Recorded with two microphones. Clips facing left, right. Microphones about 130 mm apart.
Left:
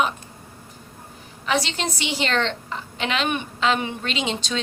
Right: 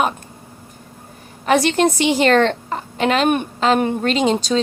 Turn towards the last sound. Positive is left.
turn(degrees=-40)  # may be behind; listen again after turning